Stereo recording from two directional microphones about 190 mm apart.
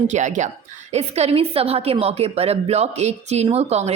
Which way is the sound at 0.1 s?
40° right (ahead or behind).